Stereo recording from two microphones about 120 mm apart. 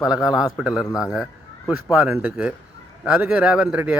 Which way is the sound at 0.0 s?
5° right (ahead or behind).